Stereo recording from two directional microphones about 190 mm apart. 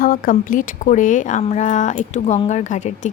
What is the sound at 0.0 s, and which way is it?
Speech, 50° left (ahead or behind).